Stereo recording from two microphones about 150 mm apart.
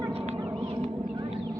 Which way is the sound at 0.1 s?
40° right (ahead or behind).